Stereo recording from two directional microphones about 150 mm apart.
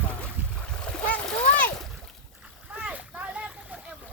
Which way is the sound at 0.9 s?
5° left (ahead or behind).